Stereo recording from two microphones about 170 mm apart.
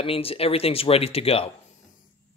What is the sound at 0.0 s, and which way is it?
Speech, 35° left (ahead or behind).